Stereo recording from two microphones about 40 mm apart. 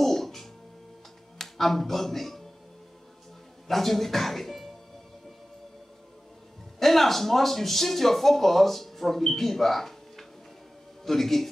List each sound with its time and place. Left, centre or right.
0.0 s music: centre
1.4 s speech: centre
3.6 s speech: centre
6.8 s speech: centre